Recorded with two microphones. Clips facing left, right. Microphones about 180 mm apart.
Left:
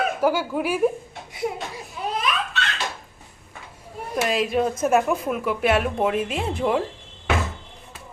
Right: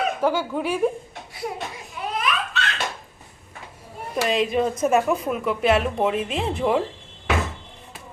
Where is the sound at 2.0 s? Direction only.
30° left (ahead or behind).